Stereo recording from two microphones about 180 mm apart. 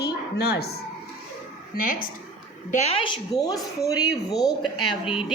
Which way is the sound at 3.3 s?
20° left (ahead or behind).